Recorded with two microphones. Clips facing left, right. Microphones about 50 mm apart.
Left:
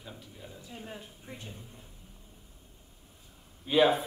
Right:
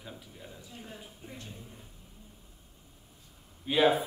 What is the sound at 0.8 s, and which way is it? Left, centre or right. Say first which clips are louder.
Speech: left 2 dB; left.